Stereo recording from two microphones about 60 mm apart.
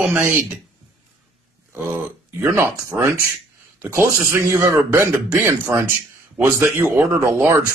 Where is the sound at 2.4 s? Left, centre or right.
Right.